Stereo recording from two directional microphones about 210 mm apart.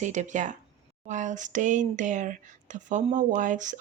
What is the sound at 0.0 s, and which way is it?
Speech, 35° right (ahead or behind).